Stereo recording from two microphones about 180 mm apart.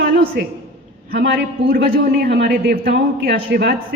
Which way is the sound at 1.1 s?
65° right (ahead or behind).